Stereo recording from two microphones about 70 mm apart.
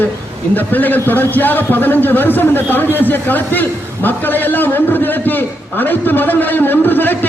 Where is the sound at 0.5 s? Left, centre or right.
Left.